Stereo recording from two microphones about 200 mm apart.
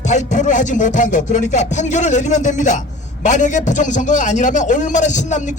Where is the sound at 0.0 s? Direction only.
35° left (ahead or behind).